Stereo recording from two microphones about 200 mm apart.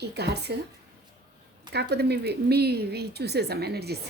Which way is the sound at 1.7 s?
55° right (ahead or behind).